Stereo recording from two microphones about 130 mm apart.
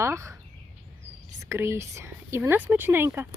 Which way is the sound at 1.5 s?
20° right (ahead or behind).